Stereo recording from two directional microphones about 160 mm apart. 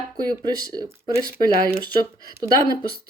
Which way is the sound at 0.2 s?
25° right (ahead or behind).